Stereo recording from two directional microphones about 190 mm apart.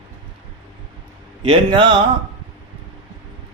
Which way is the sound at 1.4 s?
25° right (ahead or behind).